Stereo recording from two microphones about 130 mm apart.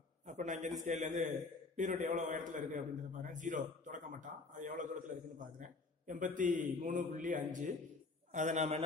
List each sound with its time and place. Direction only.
0.3 s a man's voice: 70° right (ahead or behind)
1.8 s a man's voice: 80° right
8.3 s a man's voice: 65° right (ahead or behind)